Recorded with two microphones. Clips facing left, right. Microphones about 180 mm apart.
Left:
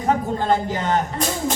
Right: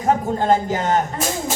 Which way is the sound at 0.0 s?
45° right (ahead or behind).